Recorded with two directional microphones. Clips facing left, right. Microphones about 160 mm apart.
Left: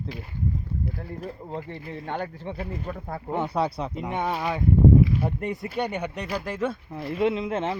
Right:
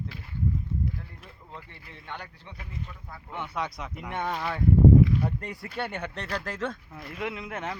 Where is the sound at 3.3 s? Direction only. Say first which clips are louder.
Left 8 dB; 40° left (ahead or behind).